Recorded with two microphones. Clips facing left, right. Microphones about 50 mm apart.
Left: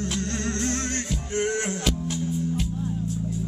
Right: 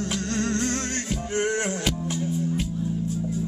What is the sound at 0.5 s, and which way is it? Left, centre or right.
Music, right.